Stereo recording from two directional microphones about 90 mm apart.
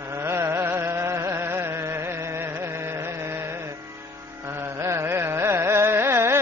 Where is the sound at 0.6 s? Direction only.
30° right (ahead or behind).